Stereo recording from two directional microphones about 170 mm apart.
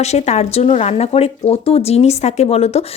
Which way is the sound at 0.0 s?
40° left (ahead or behind).